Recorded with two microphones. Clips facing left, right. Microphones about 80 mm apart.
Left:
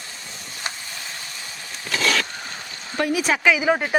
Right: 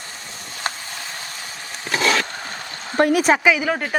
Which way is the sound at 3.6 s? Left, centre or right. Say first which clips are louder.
Left 2 dB; centre.